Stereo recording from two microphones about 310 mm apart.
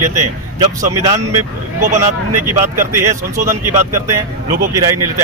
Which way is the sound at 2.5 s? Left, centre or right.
Centre.